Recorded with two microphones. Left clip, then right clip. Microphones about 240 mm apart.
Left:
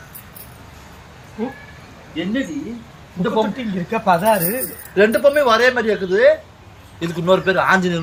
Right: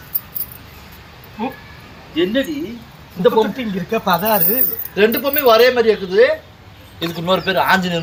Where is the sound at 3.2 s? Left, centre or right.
Centre.